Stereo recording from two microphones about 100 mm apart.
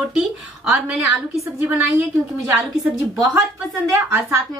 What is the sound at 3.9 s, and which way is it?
Speech, 30° right (ahead or behind).